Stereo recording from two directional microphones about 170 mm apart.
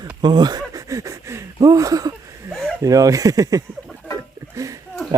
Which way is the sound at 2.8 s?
20° right (ahead or behind).